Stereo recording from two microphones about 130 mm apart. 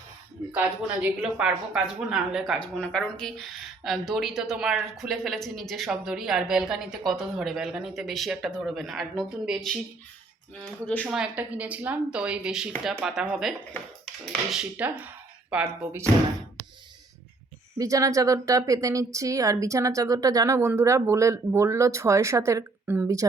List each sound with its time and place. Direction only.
0.5 s speech: 10° right (ahead or behind); by 11.1 s 10° left (ahead or behind)
11.1 s speech: 10° right (ahead or behind)
17.7 s a woman's voice: 25° right (ahead or behind)